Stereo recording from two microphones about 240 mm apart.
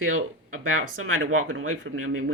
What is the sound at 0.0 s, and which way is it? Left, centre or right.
Speech, right.